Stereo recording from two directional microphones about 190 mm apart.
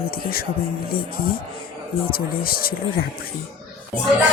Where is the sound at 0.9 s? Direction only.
50° left (ahead or behind).